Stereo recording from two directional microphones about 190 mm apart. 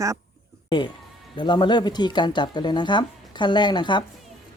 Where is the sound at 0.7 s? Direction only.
25° left (ahead or behind).